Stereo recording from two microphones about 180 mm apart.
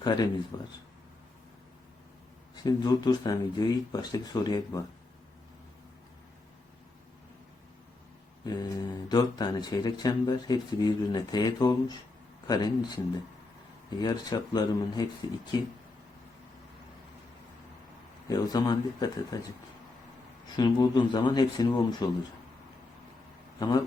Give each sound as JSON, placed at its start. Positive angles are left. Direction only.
{"t": 0.0, "sound": "a man's voice", "side_deg": 25}
{"t": 2.6, "sound": "speech", "side_deg": 20}
{"t": 8.4, "sound": "speech", "side_deg": 25}
{"t": 14.0, "sound": "speech", "side_deg": 20}
{"t": 18.3, "sound": "speech", "side_deg": 20}
{"t": 20.6, "sound": "speech", "side_deg": 25}
{"t": 23.6, "sound": "speech", "side_deg": 25}